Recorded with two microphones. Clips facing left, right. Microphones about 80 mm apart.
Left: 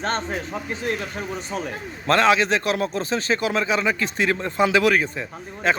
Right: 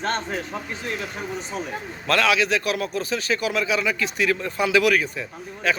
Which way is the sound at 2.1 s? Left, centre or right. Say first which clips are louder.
Left 3 dB; left.